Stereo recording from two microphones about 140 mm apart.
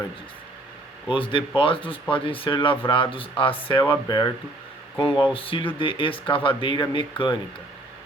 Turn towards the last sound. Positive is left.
turn(degrees=35)  # may be behind; listen again after turning